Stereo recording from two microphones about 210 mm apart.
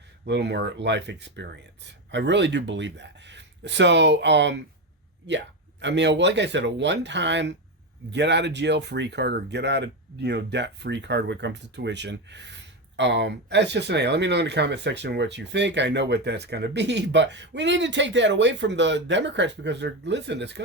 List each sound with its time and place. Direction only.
0.3 s speech: 55° right (ahead or behind)
5.8 s speech: 55° right (ahead or behind)